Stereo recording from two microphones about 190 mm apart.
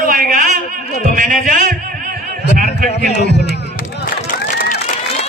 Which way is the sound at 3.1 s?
60° left (ahead or behind).